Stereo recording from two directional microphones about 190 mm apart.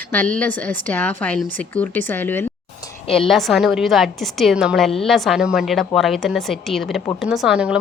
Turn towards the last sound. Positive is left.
turn(degrees=-5)  # may be behind; listen again after turning